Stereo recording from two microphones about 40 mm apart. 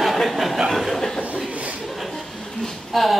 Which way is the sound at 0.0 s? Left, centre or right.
Centre.